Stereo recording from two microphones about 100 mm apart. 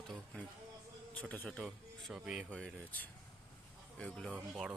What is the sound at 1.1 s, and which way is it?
Speech, 15° left (ahead or behind).